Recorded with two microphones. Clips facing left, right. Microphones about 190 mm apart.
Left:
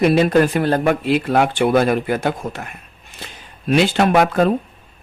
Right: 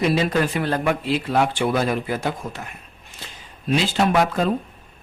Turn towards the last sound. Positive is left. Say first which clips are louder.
# left 4 dB
turn(degrees=60)  # may be behind; listen again after turning